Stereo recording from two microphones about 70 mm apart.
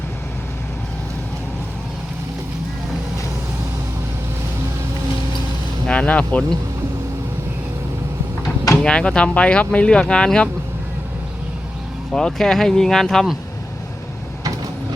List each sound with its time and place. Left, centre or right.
5.9 s speech: centre
8.8 s speech: centre
12.1 s speech: centre